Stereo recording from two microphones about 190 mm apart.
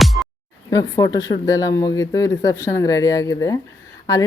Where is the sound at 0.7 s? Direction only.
20° left (ahead or behind).